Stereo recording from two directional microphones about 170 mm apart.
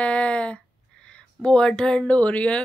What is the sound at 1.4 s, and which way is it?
Speech, 5° left (ahead or behind).